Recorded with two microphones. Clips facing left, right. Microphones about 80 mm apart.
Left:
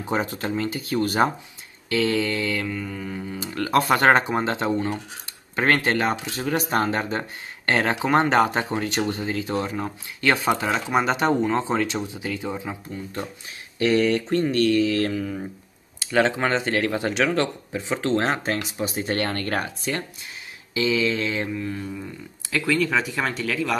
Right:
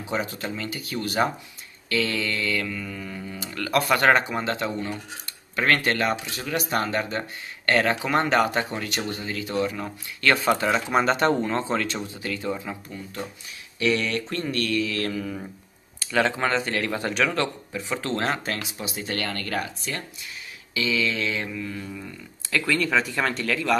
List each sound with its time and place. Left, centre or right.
0.0 s speech: left
1.9 s speech: left
5.6 s speech: left
10.7 s speech: centre
13.8 s speech: left
15.1 s speech: centre
16.1 s speech: centre
17.7 s speech: left
20.7 s speech: left; by 23.8 s centre